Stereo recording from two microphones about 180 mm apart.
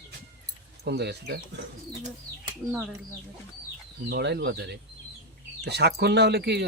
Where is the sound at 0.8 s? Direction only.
70° right (ahead or behind).